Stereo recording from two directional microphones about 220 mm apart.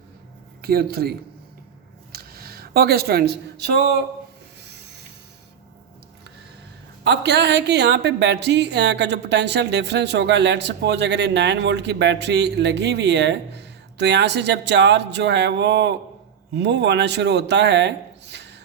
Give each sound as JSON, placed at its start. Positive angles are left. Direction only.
{"t": 0.6, "sound": "speech", "side_deg": -45}
{"t": 2.1, "sound": "a sound", "side_deg": -45}
{"t": 7.0, "sound": "speech", "side_deg": -50}